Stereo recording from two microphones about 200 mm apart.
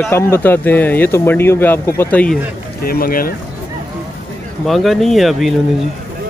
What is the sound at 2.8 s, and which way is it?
Speech, 45° left (ahead or behind).